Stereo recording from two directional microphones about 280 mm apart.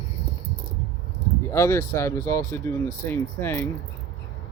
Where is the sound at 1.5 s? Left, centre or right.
Centre.